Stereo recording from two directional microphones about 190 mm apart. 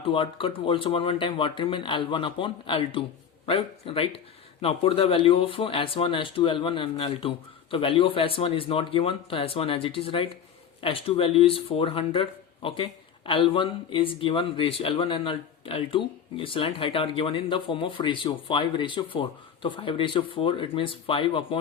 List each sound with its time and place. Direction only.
0.0 s speech: 25° left (ahead or behind)